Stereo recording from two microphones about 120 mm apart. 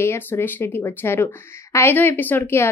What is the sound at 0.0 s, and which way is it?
A woman's voice, 20° left (ahead or behind).